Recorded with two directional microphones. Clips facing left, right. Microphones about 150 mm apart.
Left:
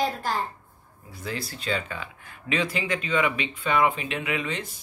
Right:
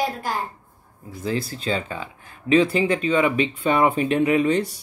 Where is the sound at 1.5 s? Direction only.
30° right (ahead or behind).